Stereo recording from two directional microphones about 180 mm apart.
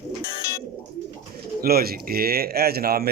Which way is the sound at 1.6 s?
55° right (ahead or behind).